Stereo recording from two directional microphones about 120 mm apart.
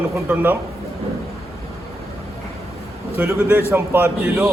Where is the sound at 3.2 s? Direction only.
20° right (ahead or behind).